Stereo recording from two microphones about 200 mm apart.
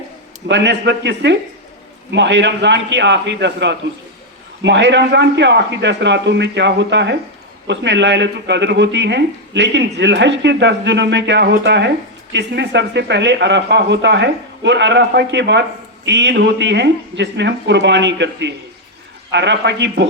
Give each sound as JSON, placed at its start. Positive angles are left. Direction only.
{"t": 0.4, "sound": "speech", "side_deg": -60}